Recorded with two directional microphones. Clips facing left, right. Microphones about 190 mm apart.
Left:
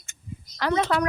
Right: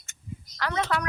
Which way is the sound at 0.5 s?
30° left (ahead or behind).